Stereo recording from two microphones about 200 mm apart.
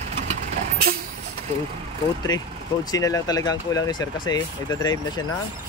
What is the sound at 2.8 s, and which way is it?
Speech, 20° left (ahead or behind).